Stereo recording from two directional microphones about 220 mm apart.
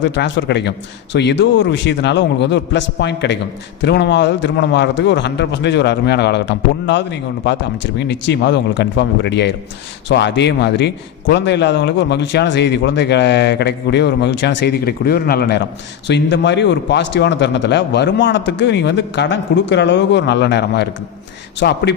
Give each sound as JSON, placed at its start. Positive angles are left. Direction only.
{"t": 0.0, "sound": "a man's voice", "side_deg": 55}